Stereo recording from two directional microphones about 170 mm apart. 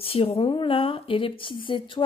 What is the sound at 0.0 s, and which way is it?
Speech, 35° left (ahead or behind).